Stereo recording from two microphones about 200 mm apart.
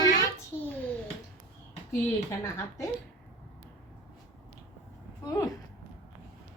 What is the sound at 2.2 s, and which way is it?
Speech, 15° left (ahead or behind).